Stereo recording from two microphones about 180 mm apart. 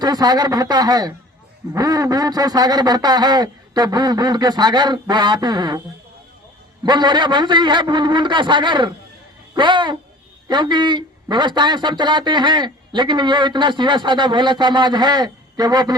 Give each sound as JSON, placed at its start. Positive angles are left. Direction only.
{"t": 0.0, "sound": "speech", "side_deg": -20}
{"t": 6.8, "sound": "speech", "side_deg": -25}